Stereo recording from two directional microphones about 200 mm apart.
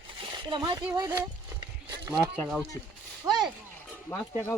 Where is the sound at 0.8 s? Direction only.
10° right (ahead or behind).